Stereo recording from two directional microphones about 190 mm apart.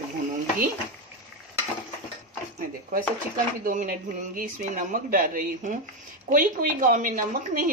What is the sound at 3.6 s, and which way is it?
Speech, 45° right (ahead or behind).